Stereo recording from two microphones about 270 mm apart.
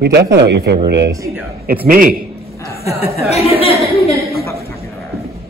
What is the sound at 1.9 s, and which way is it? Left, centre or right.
Speech, right.